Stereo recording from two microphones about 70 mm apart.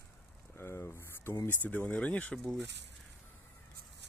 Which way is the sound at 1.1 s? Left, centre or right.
Left.